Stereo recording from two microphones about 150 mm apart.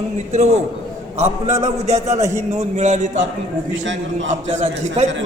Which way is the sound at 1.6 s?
45° right (ahead or behind).